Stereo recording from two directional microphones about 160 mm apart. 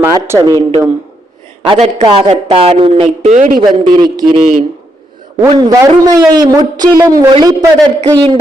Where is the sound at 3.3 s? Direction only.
45° right (ahead or behind).